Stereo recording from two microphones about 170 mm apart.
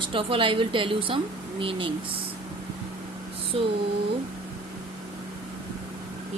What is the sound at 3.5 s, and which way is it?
Speech, 35° right (ahead or behind).